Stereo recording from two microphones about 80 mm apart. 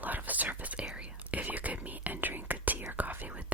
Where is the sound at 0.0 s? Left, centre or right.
Right.